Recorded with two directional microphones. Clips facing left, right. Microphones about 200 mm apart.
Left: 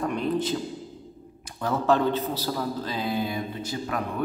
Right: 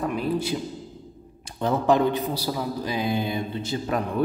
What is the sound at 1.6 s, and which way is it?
A man's voice, 20° right (ahead or behind).